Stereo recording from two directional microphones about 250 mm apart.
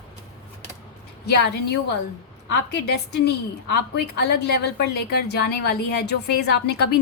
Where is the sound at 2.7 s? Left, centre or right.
Left.